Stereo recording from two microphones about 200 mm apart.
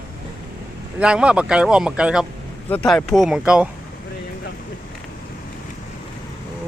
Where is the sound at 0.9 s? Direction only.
5° right (ahead or behind).